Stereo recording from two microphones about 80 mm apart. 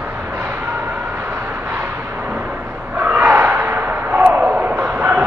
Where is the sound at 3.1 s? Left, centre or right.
Right.